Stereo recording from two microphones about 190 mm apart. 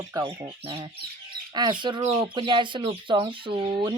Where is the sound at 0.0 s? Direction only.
20° right (ahead or behind).